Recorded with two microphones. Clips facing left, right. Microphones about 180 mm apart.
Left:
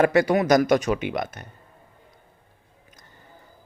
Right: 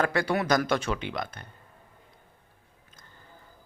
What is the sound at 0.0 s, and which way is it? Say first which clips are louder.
Speech: left 7 dB; 20° left (ahead or behind).